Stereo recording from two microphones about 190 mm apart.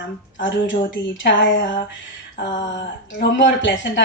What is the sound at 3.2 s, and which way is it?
Speech, 70° left (ahead or behind).